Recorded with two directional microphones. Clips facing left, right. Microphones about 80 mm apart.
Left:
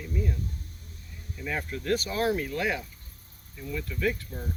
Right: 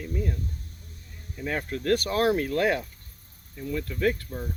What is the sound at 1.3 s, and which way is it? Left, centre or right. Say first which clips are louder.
Speech: right 3 dB; right.